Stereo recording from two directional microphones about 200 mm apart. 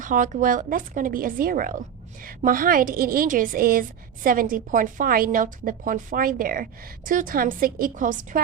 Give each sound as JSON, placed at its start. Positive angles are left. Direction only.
{"t": 0.0, "sound": "a woman's voice", "side_deg": -40}